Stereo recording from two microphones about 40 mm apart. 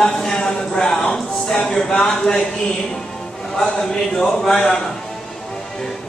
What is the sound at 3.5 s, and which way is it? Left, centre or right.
Speech, centre.